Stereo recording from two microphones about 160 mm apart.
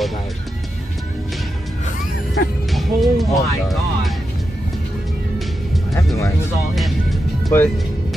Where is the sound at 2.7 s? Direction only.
Centre (ahead or behind).